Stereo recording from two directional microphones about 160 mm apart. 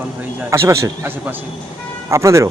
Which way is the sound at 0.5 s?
15° right (ahead or behind).